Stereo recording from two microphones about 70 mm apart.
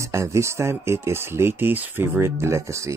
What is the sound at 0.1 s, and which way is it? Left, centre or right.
Speech, right.